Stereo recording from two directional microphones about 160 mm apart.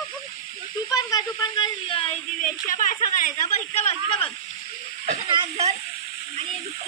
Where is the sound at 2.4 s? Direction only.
60° left (ahead or behind); by 4.3 s 40° left (ahead or behind).